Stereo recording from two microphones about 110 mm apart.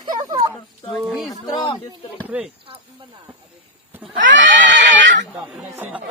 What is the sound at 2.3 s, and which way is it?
Speech, 10° right (ahead or behind).